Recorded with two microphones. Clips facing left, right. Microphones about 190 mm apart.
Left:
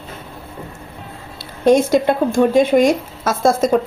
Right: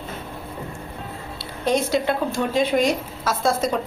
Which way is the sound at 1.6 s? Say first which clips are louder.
Left 8 dB; 50° left (ahead or behind).